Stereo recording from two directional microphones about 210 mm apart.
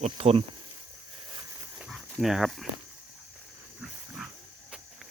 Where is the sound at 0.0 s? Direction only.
30° right (ahead or behind).